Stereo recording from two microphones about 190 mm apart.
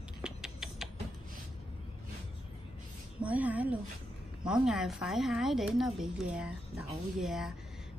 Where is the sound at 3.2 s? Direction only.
10° right (ahead or behind).